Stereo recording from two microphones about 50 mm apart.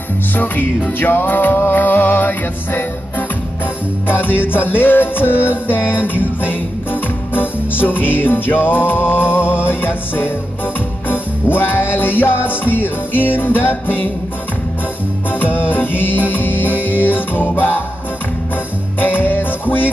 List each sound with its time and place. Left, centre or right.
0.3 s music: left
15.3 s music: left
18.9 s music: left